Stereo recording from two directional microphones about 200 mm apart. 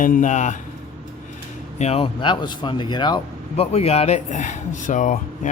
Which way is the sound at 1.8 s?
30° left (ahead or behind).